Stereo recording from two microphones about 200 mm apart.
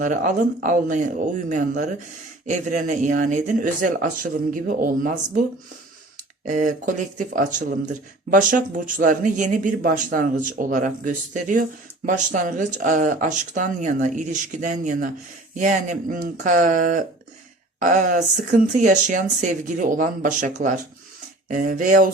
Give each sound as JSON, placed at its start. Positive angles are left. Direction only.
{"t": 0.0, "sound": "speech", "side_deg": -40}
{"t": 6.5, "sound": "speech", "side_deg": -40}